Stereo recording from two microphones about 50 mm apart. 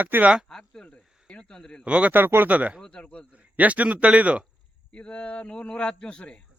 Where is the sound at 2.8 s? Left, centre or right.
Left.